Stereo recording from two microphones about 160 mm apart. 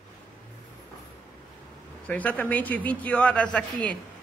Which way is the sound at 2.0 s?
10° left (ahead or behind).